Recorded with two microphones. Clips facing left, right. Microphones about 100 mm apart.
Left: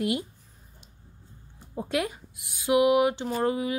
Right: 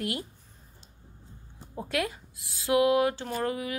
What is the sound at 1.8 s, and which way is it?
Speech, 20° left (ahead or behind).